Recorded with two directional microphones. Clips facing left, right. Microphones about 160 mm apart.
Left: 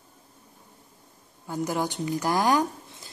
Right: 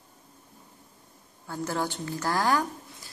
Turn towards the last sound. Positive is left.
turn(degrees=20)  # may be behind; listen again after turning